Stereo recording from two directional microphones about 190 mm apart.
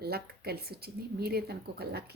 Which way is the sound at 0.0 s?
55° right (ahead or behind).